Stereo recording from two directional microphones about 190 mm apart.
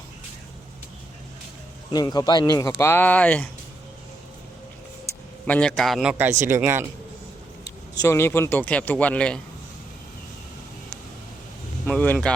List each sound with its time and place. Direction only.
1.9 s speech: 20° left (ahead or behind)
5.5 s speech: 5° left (ahead or behind); by 6.8 s 15° right (ahead or behind)
7.6 s speech: 15° left (ahead or behind)
11.9 s speech: 10° left (ahead or behind)